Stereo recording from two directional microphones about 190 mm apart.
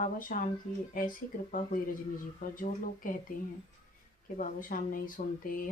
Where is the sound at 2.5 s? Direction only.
45° left (ahead or behind).